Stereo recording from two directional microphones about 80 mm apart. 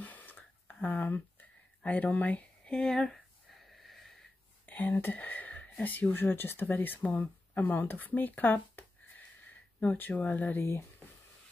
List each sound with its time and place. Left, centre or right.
0.0 s a sound: left
1.8 s speech: centre
3.8 s wheeze: centre
4.6 s speech: left